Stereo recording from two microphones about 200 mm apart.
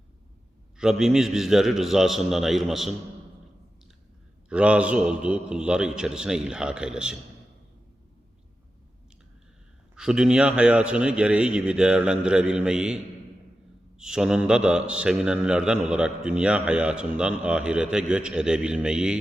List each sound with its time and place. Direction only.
0.8 s a man's voice: 5° right (ahead or behind)
4.4 s a man's voice: 5° right (ahead or behind)
9.9 s a man's voice: 5° right (ahead or behind)
14.0 s a man's voice: 5° right (ahead or behind)